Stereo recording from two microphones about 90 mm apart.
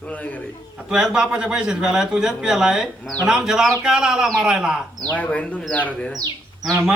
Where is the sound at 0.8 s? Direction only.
10° right (ahead or behind).